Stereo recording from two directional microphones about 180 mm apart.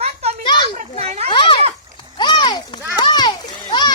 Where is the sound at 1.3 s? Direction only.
25° left (ahead or behind).